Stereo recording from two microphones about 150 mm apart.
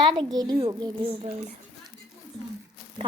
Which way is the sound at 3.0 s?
35° right (ahead or behind).